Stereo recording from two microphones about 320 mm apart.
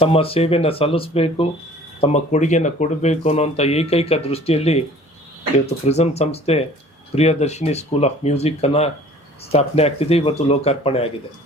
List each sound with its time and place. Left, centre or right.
0.0 s speech: centre